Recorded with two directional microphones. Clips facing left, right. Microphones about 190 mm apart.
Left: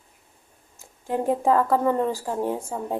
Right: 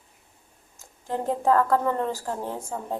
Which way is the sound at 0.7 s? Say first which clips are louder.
Left 3 dB; 15° left (ahead or behind).